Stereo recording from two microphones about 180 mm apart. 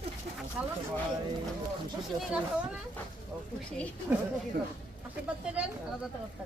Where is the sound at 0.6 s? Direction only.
10° right (ahead or behind).